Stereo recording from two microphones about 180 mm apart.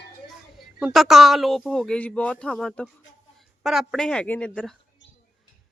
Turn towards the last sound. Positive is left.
turn(degrees=5)  # may be behind; listen again after turning